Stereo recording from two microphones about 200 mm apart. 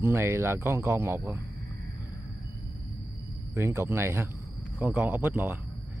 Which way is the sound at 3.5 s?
15° right (ahead or behind).